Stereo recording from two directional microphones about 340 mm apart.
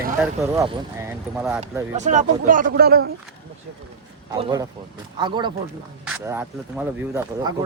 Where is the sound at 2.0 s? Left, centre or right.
Right.